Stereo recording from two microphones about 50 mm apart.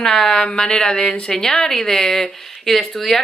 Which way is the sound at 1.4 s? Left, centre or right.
Centre.